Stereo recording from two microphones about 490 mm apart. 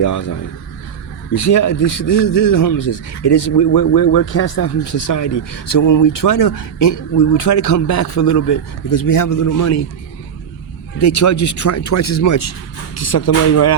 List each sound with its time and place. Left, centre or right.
0.0 s a man's voice: left
1.3 s a man's voice: left
4.0 s speech: left
4.9 s a man's voice: left
5.2 s speech: left
5.8 s a man's voice: left
6.7 s speech: left
7.3 s a man's voice: left
11.0 s a man's voice: left